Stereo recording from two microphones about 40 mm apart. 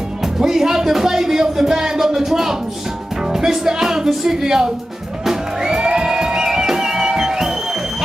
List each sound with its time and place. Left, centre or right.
0.4 s speech: centre
5.2 s music: centre